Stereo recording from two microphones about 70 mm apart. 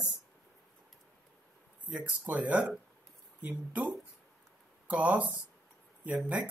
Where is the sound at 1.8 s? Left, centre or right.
Right.